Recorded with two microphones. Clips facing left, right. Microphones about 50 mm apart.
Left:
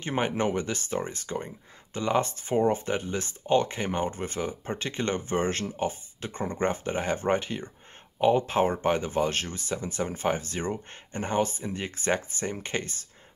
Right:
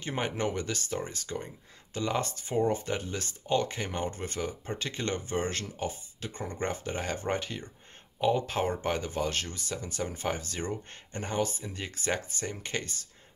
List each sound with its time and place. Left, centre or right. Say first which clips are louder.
0.0 s speech: left 4 dB; left
2.3 s speech: left 4 dB; left
3.0 s speech: left 4 dB; centre